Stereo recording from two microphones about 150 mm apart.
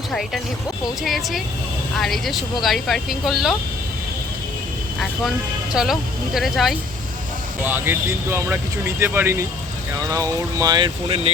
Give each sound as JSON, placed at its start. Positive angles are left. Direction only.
{"t": 1.0, "sound": "speech", "side_deg": 0}
{"t": 5.7, "sound": "speech", "side_deg": -5}
{"t": 7.6, "sound": "speech", "side_deg": -15}